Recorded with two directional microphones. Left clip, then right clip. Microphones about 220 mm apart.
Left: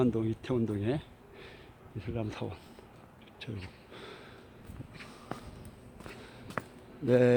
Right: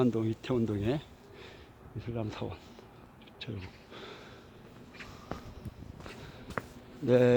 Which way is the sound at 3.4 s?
5° left (ahead or behind).